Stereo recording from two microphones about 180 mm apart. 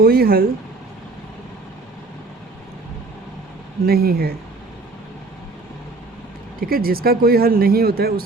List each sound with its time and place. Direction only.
0.0 s speech: 55° right (ahead or behind)
3.8 s speech: 60° right (ahead or behind)
6.6 s speech: 55° right (ahead or behind)